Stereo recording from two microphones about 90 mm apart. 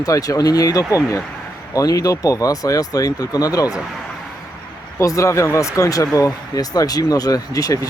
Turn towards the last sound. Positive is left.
turn(degrees=40)  # may be behind; listen again after turning